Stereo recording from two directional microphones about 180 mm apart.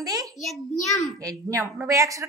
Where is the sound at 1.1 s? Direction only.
20° right (ahead or behind).